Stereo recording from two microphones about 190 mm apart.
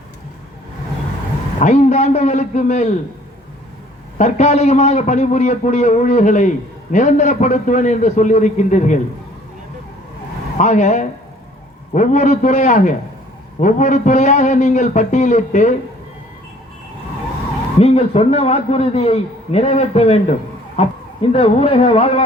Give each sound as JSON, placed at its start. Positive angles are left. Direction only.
{"t": 1.5, "sound": "a man's voice", "side_deg": 40}
{"t": 4.2, "sound": "a man's voice", "side_deg": 35}
{"t": 10.6, "sound": "a man's voice", "side_deg": 35}
{"t": 17.7, "sound": "a man's voice", "side_deg": 35}